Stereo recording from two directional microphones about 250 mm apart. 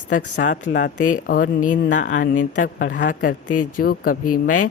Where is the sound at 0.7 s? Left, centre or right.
Left.